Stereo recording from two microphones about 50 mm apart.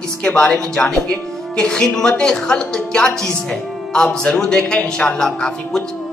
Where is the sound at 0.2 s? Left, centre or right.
Left.